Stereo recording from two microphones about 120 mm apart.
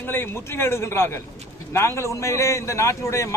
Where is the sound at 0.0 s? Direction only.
15° left (ahead or behind).